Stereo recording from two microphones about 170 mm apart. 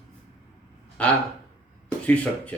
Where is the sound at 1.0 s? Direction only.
5° left (ahead or behind).